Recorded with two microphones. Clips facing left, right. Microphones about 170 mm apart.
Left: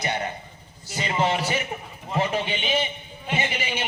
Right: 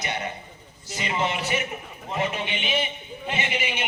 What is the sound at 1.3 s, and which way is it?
Speech, 35° left (ahead or behind).